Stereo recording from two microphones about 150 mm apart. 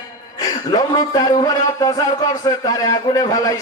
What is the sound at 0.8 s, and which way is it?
A man's voice, 25° left (ahead or behind).